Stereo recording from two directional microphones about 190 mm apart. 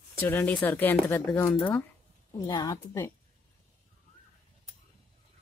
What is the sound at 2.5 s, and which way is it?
Speech, 20° left (ahead or behind).